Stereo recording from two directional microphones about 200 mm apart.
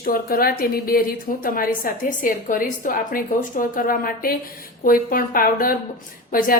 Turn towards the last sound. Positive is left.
turn(degrees=45)  # may be behind; listen again after turning